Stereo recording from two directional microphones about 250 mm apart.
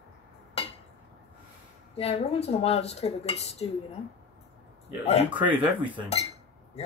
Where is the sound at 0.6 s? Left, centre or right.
Left.